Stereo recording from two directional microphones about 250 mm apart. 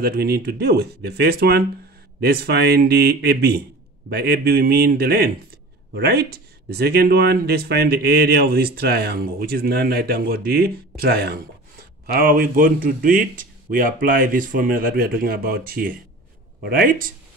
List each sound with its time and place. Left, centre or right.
0.0 s speech: right